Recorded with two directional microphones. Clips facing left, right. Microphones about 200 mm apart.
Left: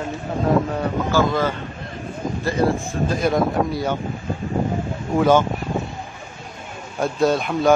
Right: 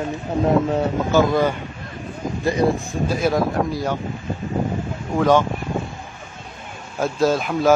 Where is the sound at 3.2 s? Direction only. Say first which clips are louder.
Left 1 dB; centre (ahead or behind).